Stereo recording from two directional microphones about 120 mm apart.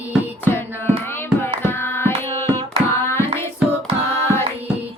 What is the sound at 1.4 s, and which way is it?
Carnatic music, 20° left (ahead or behind).